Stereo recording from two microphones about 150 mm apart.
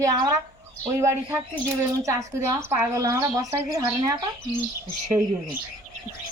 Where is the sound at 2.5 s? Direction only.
20° right (ahead or behind).